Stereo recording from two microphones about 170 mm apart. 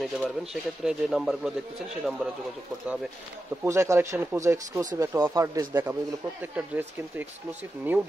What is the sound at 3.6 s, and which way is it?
Speech, 15° right (ahead or behind).